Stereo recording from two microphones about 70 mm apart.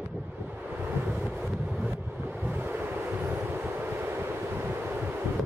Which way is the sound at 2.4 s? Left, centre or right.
Right.